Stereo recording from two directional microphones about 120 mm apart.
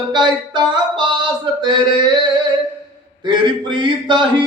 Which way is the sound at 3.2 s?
40° right (ahead or behind).